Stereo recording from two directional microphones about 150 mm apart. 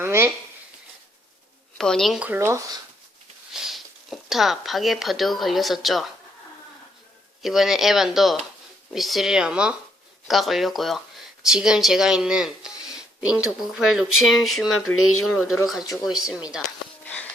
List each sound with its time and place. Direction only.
0.0 s a sound: 15° right (ahead or behind)
1.8 s speech: 5° left (ahead or behind); by 2.7 s 20° right (ahead or behind)
3.5 s speech: centre (ahead or behind)
7.4 s speech: centre (ahead or behind)